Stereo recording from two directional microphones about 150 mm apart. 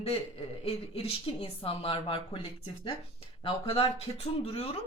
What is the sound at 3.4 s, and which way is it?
Speech, 40° left (ahead or behind).